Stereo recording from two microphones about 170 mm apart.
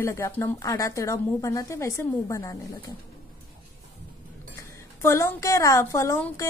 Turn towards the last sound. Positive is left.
turn(degrees=15)  # may be behind; listen again after turning